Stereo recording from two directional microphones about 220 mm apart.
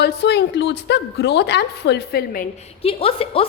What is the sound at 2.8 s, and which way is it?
Speech, 25° left (ahead or behind).